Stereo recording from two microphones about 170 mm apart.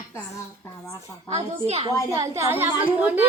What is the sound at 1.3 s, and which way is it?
Speech, 40° right (ahead or behind).